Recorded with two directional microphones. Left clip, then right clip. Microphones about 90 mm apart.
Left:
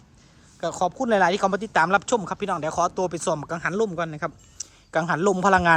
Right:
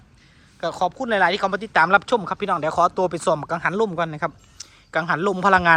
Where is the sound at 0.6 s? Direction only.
45° left (ahead or behind); by 4.3 s 25° left (ahead or behind).